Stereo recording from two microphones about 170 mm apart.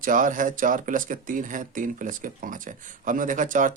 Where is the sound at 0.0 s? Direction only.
50° right (ahead or behind).